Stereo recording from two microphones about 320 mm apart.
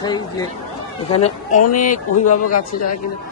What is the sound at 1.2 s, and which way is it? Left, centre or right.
Speech, left.